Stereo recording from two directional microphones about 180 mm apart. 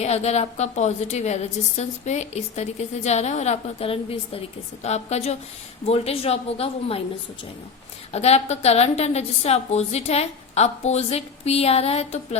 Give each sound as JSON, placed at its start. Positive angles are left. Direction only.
{"t": 0.0, "sound": "a woman's voice", "side_deg": 35}
{"t": 8.1, "sound": "a woman's voice", "side_deg": 35}